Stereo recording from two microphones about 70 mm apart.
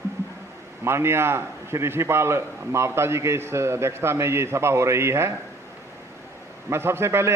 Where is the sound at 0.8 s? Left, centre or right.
Right.